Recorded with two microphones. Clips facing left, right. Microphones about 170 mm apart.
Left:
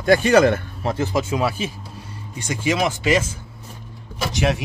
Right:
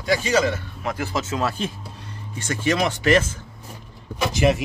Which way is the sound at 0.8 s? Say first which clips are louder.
Left 4 dB; 20° left (ahead or behind).